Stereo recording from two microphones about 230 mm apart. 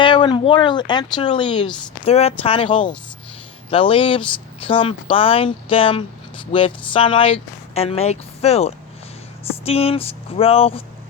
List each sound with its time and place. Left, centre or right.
0.0 s speech: centre